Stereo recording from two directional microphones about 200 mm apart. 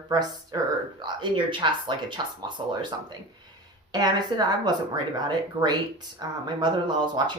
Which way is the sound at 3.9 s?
20° right (ahead or behind).